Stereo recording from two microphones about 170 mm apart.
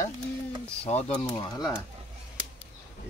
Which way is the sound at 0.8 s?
40° left (ahead or behind).